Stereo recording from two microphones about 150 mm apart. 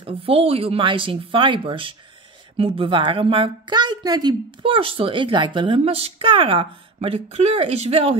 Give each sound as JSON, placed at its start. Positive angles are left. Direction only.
{"t": 0.0, "sound": "a woman's voice", "side_deg": -40}